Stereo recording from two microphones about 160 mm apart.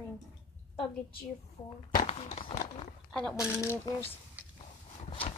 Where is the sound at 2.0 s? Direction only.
40° left (ahead or behind).